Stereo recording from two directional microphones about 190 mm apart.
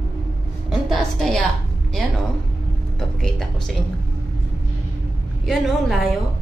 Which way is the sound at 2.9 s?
5° left (ahead or behind).